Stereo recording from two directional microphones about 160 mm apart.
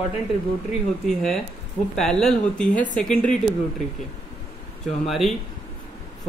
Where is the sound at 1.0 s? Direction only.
5° left (ahead or behind).